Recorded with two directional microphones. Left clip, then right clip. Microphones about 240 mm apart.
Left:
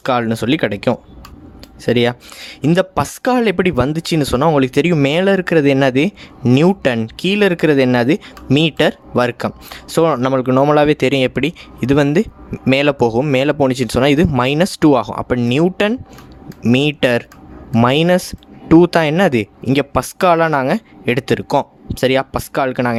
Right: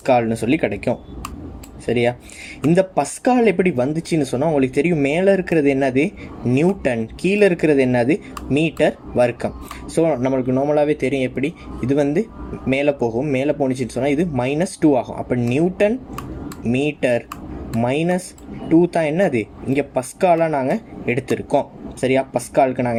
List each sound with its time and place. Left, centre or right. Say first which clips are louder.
0.0 s speech: even; left
16.7 s speech: left 4 dB; left